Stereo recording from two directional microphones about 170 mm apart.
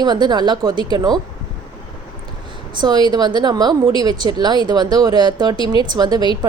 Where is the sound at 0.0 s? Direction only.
25° right (ahead or behind).